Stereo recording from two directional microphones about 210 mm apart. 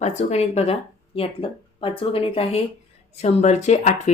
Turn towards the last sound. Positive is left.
turn(degrees=35)  # may be behind; listen again after turning